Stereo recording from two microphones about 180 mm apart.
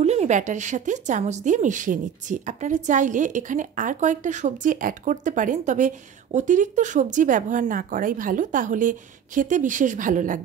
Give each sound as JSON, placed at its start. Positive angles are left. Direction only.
{"t": 0.0, "sound": "a woman's voice", "side_deg": -35}